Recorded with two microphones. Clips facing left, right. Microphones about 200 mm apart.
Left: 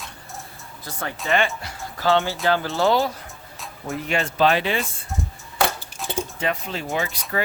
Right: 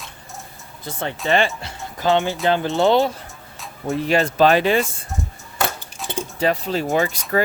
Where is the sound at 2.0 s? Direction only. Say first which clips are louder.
Right 2 dB; 15° right (ahead or behind).